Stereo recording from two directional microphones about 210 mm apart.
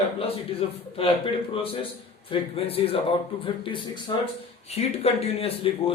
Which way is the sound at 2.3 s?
25° left (ahead or behind).